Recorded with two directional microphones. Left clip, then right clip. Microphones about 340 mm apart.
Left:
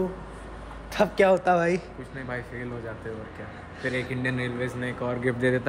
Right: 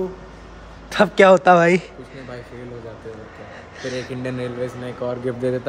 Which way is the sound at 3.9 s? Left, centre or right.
Centre.